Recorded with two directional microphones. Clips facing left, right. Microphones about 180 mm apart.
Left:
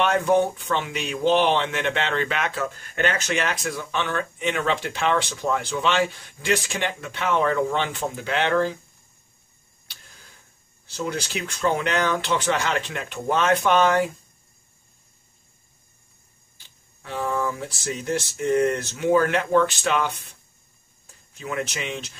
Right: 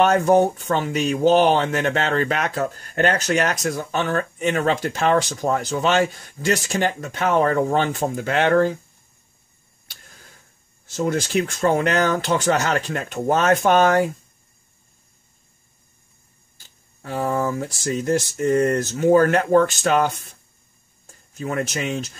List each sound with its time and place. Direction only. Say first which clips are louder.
0.0 s speech: right 4 dB; 40° right (ahead or behind)
10.9 s speech: right 6 dB; 45° right (ahead or behind)
16.5 s speech: right 2 dB; 45° right (ahead or behind)